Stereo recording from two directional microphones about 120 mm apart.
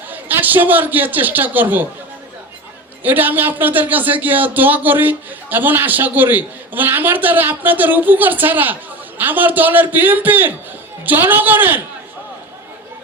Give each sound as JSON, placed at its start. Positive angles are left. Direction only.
{"t": 0.1, "sound": "a man's voice", "side_deg": -15}
{"t": 3.0, "sound": "speech", "side_deg": -15}